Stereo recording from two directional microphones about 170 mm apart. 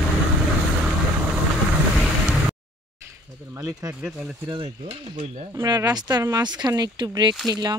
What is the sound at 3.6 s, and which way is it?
Speech, 20° right (ahead or behind).